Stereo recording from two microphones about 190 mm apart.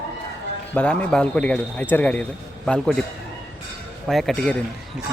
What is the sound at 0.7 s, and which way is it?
A man's voice, 5° left (ahead or behind).